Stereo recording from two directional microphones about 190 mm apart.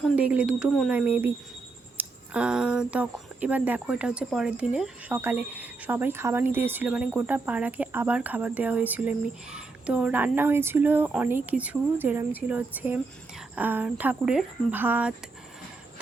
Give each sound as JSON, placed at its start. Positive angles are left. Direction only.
{"t": 0.0, "sound": "speech", "side_deg": -5}